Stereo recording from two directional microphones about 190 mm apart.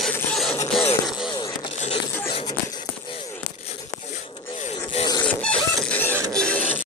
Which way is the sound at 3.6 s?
40° left (ahead or behind).